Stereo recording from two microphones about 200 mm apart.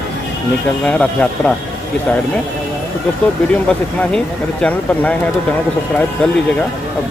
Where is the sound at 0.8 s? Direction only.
5° left (ahead or behind).